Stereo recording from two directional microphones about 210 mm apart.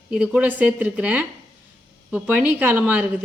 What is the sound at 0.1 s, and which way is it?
A woman's voice, 5° right (ahead or behind).